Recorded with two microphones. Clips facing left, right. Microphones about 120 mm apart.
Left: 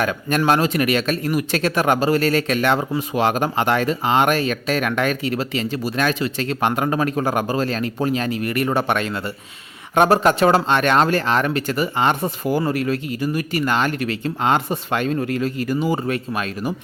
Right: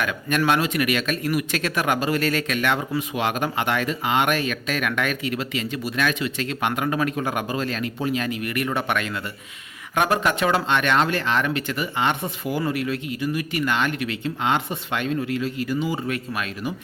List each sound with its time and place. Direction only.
0.0 s speech: 35° left (ahead or behind)
16.1 s speech: 35° left (ahead or behind)